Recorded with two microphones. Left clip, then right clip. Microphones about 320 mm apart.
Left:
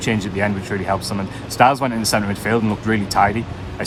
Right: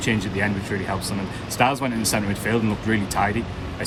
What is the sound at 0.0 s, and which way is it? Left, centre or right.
Speech, centre.